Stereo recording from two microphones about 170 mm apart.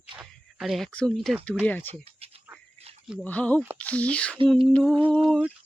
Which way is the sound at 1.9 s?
35° right (ahead or behind).